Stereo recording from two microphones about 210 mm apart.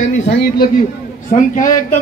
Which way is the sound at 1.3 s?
40° left (ahead or behind).